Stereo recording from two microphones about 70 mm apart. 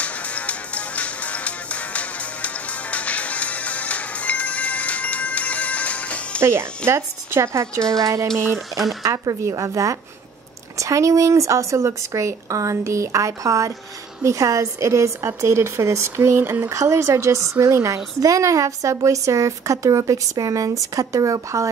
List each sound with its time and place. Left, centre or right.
0.0 s music: centre
6.4 s a woman's voice: right